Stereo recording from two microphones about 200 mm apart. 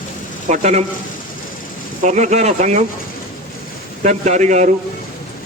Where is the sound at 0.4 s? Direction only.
35° right (ahead or behind).